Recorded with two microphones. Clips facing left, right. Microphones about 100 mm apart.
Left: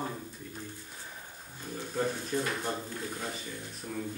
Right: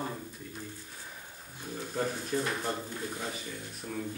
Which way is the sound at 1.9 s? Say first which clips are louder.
Left 1 dB; 5° right (ahead or behind).